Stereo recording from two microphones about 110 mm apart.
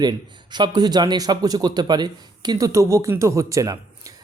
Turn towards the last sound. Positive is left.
turn(degrees=-30)  # may be behind; listen again after turning